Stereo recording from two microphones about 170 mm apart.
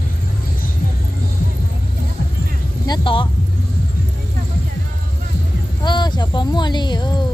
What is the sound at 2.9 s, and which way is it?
Speech, 30° left (ahead or behind).